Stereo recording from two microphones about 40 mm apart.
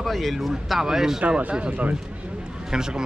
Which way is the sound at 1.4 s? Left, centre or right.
Right.